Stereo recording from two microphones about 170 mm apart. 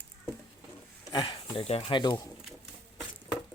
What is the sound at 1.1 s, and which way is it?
Speech, 25° left (ahead or behind).